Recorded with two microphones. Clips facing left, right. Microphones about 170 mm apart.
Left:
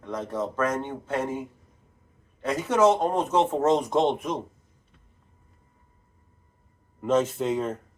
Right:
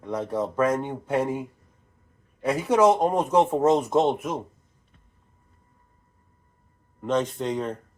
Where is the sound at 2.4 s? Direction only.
10° right (ahead or behind).